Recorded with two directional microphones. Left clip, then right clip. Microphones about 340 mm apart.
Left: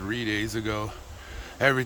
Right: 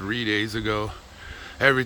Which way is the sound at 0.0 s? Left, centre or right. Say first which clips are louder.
Right 4 dB; centre.